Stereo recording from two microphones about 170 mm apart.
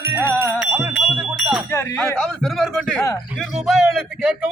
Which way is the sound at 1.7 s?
15° left (ahead or behind).